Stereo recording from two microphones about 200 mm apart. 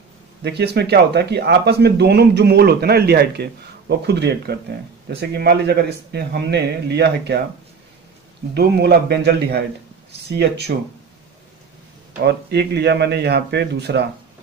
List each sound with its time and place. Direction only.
0.4 s speech: 55° right (ahead or behind)
8.5 s speech: 55° right (ahead or behind)
12.2 s speech: 55° right (ahead or behind)